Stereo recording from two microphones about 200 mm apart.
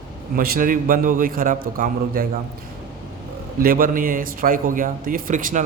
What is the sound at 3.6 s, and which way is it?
Speech, 45° right (ahead or behind).